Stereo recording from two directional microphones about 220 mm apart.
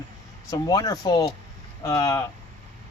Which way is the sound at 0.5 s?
15° left (ahead or behind).